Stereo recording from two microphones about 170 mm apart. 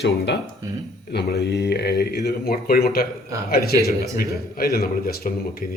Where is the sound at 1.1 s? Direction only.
80° left.